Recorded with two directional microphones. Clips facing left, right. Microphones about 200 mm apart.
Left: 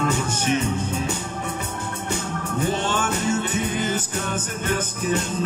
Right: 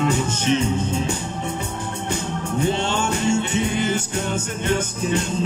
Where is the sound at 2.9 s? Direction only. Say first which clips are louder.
Right 2 dB; 25° right (ahead or behind).